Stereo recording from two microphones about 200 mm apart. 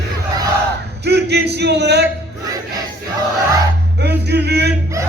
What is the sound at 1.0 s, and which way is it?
A man's voice, 55° right (ahead or behind).